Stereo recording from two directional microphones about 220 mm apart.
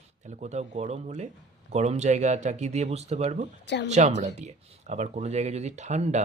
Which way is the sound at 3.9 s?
30° right (ahead or behind).